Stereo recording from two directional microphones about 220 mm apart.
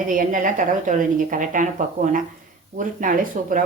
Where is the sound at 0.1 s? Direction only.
35° right (ahead or behind).